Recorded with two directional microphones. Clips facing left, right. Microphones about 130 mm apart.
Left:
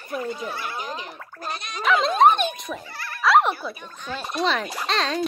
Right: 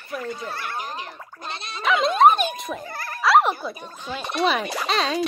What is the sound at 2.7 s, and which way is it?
Speech, 15° right (ahead or behind).